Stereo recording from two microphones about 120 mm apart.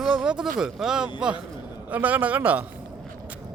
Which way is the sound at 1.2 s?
5° right (ahead or behind).